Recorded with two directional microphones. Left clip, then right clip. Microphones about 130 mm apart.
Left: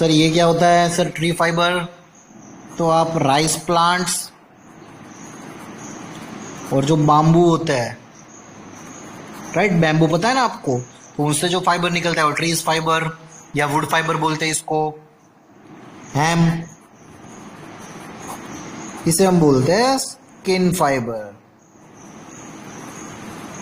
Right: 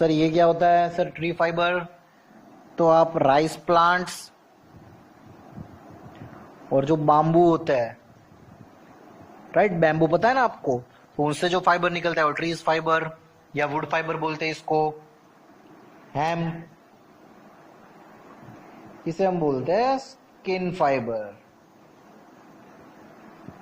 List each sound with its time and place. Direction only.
0.0 s speech: 55° right (ahead or behind)
0.6 s speech: 20° right (ahead or behind)
2.7 s speech: 50° right (ahead or behind)
6.7 s speech: 50° right (ahead or behind)
9.5 s speech: 50° right (ahead or behind)
13.5 s a man's voice: 20° right (ahead or behind)
14.7 s speech: 5° right (ahead or behind)
16.1 s speech: 25° right (ahead or behind)
19.0 s a man's voice: 20° right (ahead or behind)